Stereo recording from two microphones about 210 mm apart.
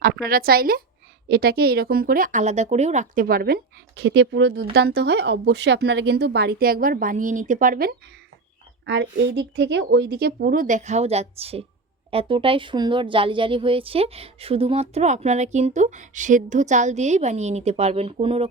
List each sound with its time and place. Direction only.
0.0 s speech: 45° right (ahead or behind)
8.9 s a woman's voice: 55° right (ahead or behind); by 18.4 s 25° right (ahead or behind)